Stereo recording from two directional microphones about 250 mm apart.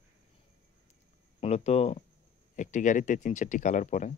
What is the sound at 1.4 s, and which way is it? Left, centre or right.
Speech, left.